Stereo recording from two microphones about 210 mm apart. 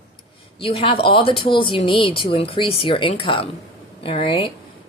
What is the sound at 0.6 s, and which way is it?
Speech, 25° left (ahead or behind).